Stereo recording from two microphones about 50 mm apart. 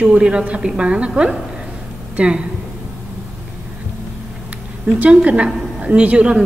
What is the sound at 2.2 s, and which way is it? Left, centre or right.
Speech, right.